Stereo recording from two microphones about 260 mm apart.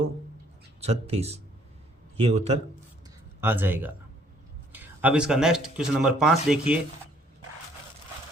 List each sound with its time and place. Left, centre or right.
0.8 s speech: right
3.4 s speech: centre